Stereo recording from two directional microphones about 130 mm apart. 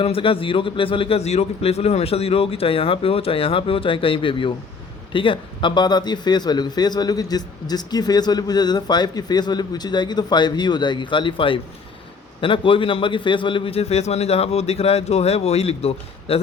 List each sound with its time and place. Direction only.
0.0 s a man's voice: 45° left (ahead or behind)